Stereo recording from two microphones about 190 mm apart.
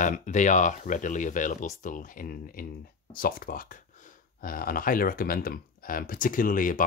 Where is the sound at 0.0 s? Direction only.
40° left (ahead or behind).